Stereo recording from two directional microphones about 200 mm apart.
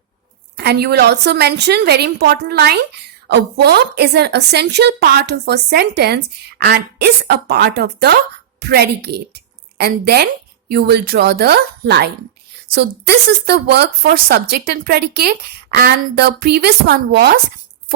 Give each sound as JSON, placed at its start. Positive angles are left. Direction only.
{"t": 0.5, "sound": "a woman's voice", "side_deg": -55}